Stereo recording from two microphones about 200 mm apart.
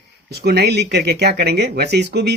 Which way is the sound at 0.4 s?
55° right (ahead or behind).